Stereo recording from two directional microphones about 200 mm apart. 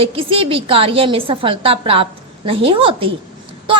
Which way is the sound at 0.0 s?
25° right (ahead or behind).